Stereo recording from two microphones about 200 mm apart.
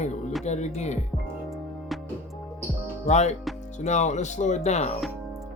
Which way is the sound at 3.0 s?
35° left (ahead or behind).